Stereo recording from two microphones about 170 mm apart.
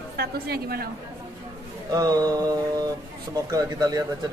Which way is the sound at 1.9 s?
20° right (ahead or behind).